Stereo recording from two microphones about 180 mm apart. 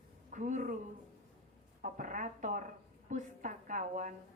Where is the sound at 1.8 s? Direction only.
45° right (ahead or behind).